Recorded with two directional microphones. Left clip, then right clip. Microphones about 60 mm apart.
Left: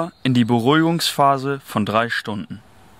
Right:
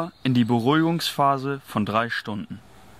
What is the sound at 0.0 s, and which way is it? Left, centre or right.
Speech, left.